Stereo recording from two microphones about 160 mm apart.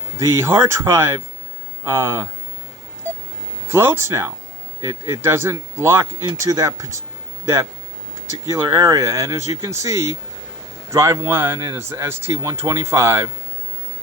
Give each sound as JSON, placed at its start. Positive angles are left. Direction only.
{"t": 0.2, "sound": "a man's voice", "side_deg": -20}
{"t": 3.7, "sound": "a man's voice", "side_deg": -15}